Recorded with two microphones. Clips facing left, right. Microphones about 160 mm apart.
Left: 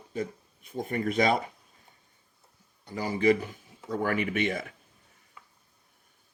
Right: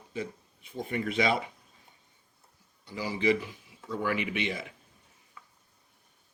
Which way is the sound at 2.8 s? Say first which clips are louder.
Left 3 dB; 50° left (ahead or behind).